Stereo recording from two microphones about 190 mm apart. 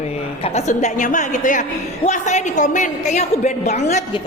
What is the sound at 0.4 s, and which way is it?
A woman's voice, 35° left (ahead or behind).